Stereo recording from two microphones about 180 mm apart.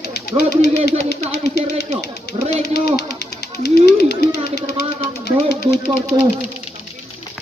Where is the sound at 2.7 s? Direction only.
65° left (ahead or behind).